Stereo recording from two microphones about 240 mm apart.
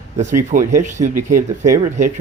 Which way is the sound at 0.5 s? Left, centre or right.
Right.